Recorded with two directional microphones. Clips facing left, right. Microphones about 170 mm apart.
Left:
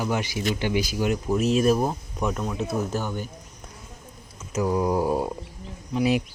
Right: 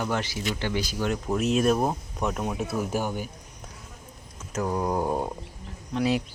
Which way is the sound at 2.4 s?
10° right (ahead or behind).